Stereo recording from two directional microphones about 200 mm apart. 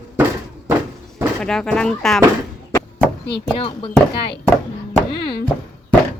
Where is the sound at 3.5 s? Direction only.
25° left (ahead or behind).